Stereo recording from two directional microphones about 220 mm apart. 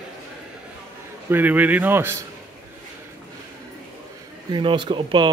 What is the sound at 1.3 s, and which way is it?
Speech, 5° right (ahead or behind).